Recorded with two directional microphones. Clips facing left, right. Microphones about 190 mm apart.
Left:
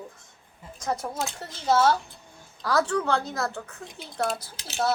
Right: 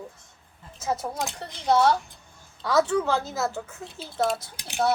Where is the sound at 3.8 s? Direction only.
15° left (ahead or behind).